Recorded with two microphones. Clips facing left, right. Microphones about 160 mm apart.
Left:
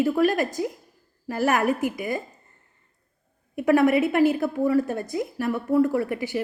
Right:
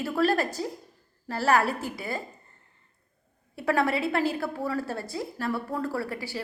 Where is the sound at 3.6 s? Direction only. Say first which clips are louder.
Left 7 dB; 20° left (ahead or behind).